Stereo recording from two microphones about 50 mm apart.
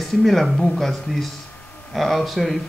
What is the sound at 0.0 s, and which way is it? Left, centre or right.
Speech, centre.